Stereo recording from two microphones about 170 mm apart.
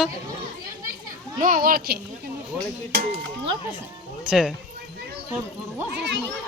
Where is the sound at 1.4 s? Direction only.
55° right (ahead or behind).